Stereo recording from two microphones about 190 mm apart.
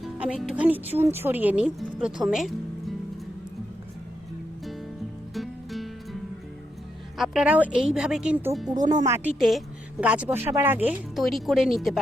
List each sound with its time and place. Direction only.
0.0 s speech: 5° right (ahead or behind)
5.3 s music: centre (ahead or behind)
7.2 s speech: 5° right (ahead or behind)
8.7 s speech: 20° right (ahead or behind)
9.4 s speech: centre (ahead or behind)